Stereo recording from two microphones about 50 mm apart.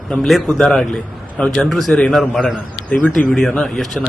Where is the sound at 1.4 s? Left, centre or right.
Left.